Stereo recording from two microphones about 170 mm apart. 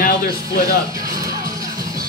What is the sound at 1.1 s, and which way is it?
Music, 20° right (ahead or behind).